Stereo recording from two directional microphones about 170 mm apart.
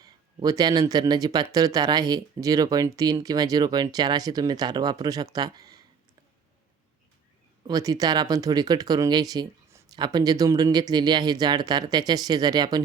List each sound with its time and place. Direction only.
0.0 s speech: 20° right (ahead or behind)
7.7 s speech: 20° right (ahead or behind)